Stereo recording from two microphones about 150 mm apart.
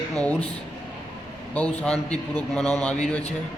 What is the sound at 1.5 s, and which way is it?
A man's voice, 10° left (ahead or behind).